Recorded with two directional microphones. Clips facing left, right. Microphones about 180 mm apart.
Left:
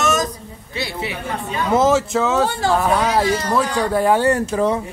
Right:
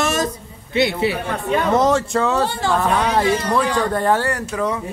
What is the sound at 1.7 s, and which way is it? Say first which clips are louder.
Speech: left 3 dB; 5° left (ahead or behind).